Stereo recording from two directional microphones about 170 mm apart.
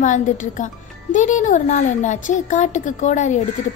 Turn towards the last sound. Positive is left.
turn(degrees=45)  # may be behind; listen again after turning